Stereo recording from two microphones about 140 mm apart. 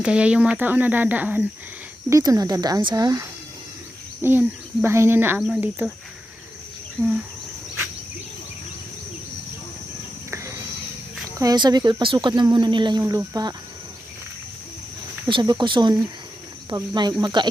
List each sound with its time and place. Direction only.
0.0 s speech: 10° right (ahead or behind)
2.0 s speech: 25° right (ahead or behind)
11.3 s speech: 30° right (ahead or behind)
15.3 s speech: 35° right (ahead or behind)